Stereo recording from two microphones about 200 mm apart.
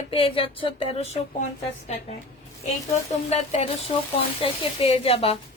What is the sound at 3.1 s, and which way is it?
Speech, 30° left (ahead or behind).